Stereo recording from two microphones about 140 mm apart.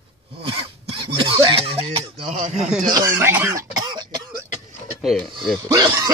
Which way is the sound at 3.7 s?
30° right (ahead or behind).